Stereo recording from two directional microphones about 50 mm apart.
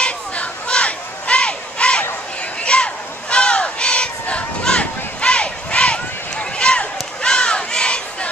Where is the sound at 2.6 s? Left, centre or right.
Left.